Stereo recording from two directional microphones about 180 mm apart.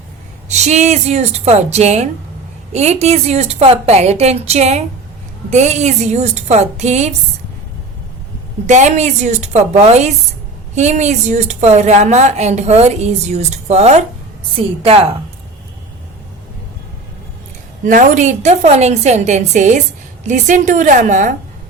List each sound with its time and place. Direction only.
0.4 s a woman's voice: 40° right (ahead or behind)
8.6 s a woman's voice: 40° right (ahead or behind)
17.8 s a woman's voice: 45° right (ahead or behind)